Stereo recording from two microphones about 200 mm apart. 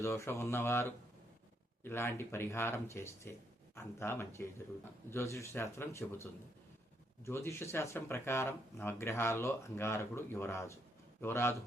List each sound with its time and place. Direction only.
0.0 s speech: 15° left (ahead or behind)
7.3 s speech: 15° left (ahead or behind)